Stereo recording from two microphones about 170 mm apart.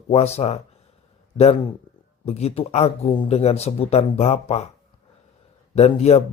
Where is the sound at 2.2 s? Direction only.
35° left (ahead or behind).